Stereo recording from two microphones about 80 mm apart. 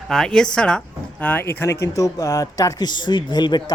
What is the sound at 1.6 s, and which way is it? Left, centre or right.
Speech, left.